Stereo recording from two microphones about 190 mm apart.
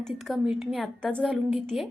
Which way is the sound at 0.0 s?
Centre (ahead or behind).